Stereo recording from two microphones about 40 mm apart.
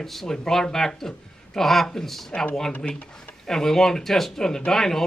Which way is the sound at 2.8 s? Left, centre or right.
Centre.